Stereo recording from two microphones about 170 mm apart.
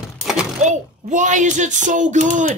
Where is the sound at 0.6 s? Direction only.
45° right (ahead or behind).